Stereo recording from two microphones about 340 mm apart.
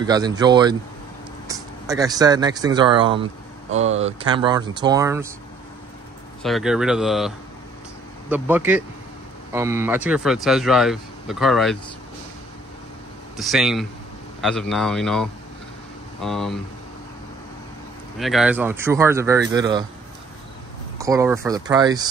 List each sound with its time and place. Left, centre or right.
0.0 s speech: centre
3.7 s speech: right
4.3 s speech: centre
6.4 s speech: centre
13.4 s speech: centre
18.2 s speech: centre
21.0 s speech: centre